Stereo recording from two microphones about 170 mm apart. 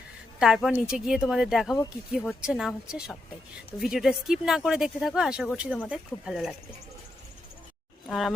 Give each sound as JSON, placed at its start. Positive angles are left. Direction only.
{"t": 0.3, "sound": "speech", "side_deg": 0}